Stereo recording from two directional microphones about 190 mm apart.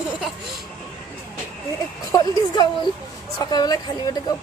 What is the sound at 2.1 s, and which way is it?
Speech, 20° left (ahead or behind).